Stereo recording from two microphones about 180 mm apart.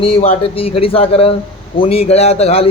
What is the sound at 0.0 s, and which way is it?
Speech, 30° left (ahead or behind).